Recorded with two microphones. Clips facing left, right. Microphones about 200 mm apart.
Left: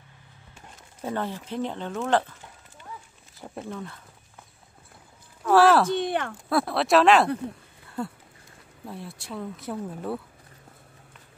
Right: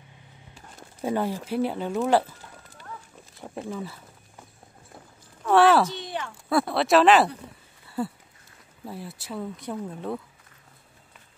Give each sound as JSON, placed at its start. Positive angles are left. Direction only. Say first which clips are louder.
{"t": 1.0, "sound": "speech", "louder": "right 4 dB", "side_deg": -10}
{"t": 3.3, "sound": "speech", "louder": "right 2 dB", "side_deg": 0}
{"t": 5.4, "sound": "speech", "louder": "even", "side_deg": 0}
{"t": 5.9, "sound": "speech", "louder": "left 8 dB", "side_deg": 55}
{"t": 6.5, "sound": "speech", "louder": "right 1 dB", "side_deg": 0}
{"t": 8.8, "sound": "speech", "louder": "right 1 dB", "side_deg": 0}